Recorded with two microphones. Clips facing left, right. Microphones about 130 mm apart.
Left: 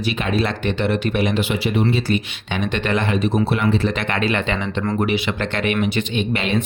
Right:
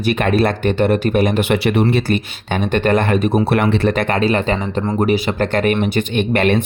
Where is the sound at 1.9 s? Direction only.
50° right (ahead or behind).